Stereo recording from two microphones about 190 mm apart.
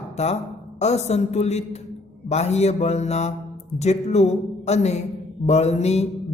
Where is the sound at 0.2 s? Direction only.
35° left (ahead or behind).